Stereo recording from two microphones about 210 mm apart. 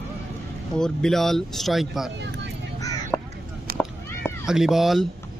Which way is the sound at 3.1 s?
5° left (ahead or behind).